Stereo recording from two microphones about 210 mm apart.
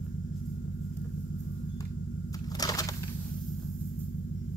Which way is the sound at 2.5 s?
20° left (ahead or behind).